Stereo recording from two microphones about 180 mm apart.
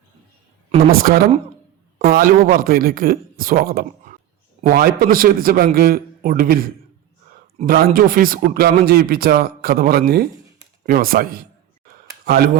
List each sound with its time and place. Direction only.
0.8 s a man's voice: 55° right (ahead or behind)